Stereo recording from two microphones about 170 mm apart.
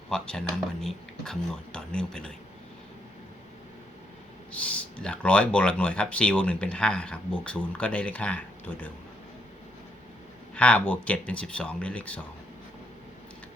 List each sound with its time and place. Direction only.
0.1 s speech: 5° left (ahead or behind)
4.5 s speech: 5° left (ahead or behind)
10.5 s speech: 5° left (ahead or behind)